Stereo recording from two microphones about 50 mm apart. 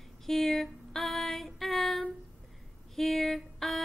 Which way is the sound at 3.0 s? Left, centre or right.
Centre.